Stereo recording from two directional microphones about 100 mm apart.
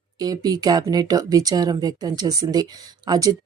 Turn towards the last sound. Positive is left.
turn(degrees=-40)  # may be behind; listen again after turning